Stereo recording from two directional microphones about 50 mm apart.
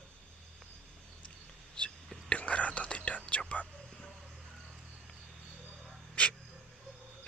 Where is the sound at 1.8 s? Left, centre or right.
Left.